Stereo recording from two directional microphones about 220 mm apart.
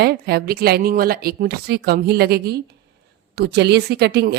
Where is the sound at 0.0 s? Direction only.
45° right (ahead or behind).